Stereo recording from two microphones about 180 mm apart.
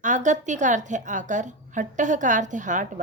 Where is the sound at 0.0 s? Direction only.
45° right (ahead or behind).